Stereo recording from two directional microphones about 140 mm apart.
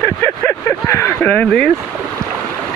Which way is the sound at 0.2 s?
15° left (ahead or behind).